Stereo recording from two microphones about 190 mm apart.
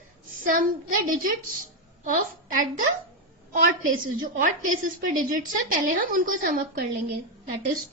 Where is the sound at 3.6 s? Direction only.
45° right (ahead or behind).